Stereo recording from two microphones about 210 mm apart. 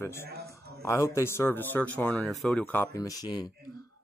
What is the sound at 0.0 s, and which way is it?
Speech, 10° left (ahead or behind).